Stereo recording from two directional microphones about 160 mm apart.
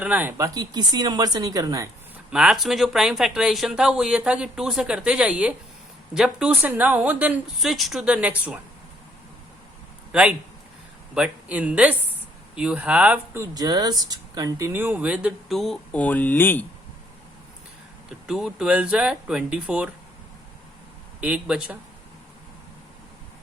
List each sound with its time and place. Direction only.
0.0 s speech: 10° right (ahead or behind)
2.3 s speech: 5° right (ahead or behind)
10.1 s a man's voice: 5° right (ahead or behind); by 16.6 s 10° left (ahead or behind)
18.3 s speech: 5° right (ahead or behind)
21.2 s speech: 5° right (ahead or behind)